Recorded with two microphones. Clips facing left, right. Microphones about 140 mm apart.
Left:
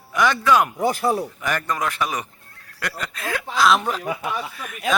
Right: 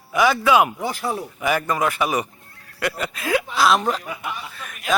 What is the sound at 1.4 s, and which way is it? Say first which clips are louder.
Speech: right 4 dB; 5° right (ahead or behind).